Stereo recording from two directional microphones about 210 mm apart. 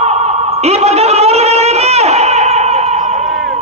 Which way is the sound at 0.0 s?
30° right (ahead or behind).